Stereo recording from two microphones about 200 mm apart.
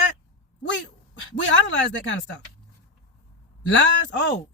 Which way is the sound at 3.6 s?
70° left (ahead or behind).